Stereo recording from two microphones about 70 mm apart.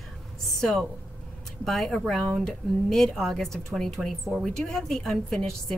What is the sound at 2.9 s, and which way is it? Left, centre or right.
A woman's voice, centre.